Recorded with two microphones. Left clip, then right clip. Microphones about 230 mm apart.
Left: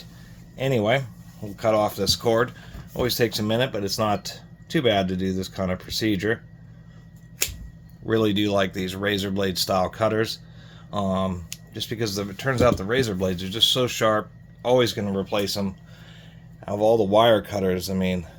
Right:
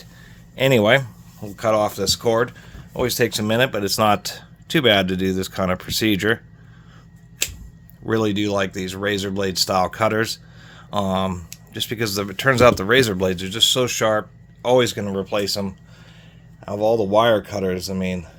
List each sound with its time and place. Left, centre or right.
0.5 s speech: right
1.4 s speech: right
8.0 s speech: right